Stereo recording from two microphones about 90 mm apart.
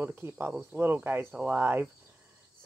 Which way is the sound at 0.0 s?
25° right (ahead or behind).